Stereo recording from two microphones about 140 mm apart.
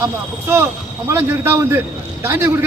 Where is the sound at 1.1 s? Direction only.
15° right (ahead or behind).